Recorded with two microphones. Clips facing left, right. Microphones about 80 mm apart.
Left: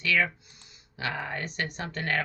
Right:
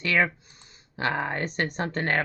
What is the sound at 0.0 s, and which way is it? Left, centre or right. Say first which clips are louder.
Speech: right 3 dB; right.